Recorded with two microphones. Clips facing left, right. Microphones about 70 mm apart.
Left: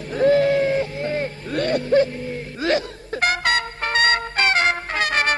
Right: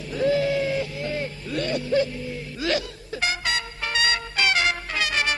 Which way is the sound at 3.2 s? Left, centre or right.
Left.